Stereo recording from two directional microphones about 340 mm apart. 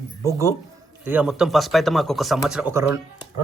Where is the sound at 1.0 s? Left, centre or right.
Centre.